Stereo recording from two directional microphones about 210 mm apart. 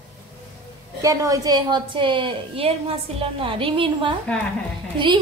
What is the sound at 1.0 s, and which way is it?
A woman's voice, 15° right (ahead or behind).